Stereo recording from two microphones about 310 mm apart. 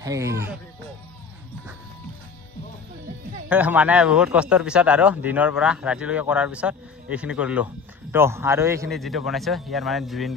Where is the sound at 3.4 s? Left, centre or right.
Centre.